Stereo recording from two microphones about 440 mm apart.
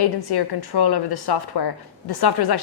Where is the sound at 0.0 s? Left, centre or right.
Left.